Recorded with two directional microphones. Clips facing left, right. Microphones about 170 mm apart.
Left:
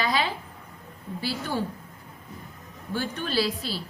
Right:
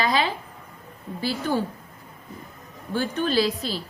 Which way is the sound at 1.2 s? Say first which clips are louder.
Right 5 dB; 45° right (ahead or behind).